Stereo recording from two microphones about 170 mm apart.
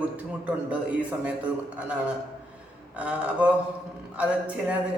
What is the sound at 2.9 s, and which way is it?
A man's voice, 10° right (ahead or behind).